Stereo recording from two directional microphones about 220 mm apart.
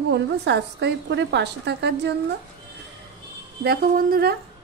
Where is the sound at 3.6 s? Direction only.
45° right (ahead or behind).